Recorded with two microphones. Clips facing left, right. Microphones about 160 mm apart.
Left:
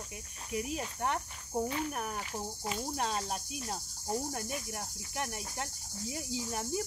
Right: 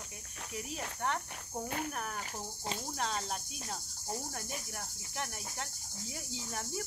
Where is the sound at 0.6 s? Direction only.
15° left (ahead or behind).